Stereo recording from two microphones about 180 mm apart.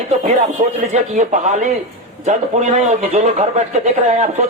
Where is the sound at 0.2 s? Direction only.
40° right (ahead or behind).